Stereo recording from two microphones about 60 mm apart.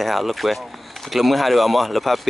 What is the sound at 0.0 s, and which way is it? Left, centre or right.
Speech, centre.